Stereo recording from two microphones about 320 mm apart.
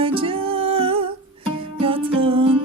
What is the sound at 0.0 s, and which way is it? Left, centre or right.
Music, centre.